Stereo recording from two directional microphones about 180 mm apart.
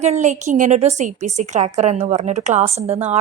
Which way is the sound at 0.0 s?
40° right (ahead or behind).